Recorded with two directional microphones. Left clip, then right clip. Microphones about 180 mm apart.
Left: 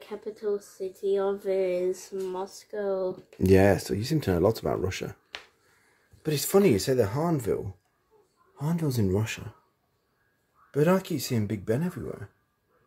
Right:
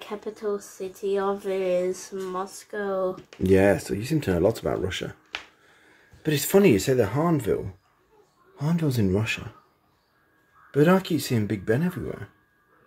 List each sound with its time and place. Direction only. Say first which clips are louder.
0.1 s speech: right 1 dB; 15° left (ahead or behind)
3.4 s speech: right 1 dB; 30° left (ahead or behind)
6.2 s speech: right 3 dB; 20° left (ahead or behind)
10.7 s speech: right 4 dB; 15° left (ahead or behind)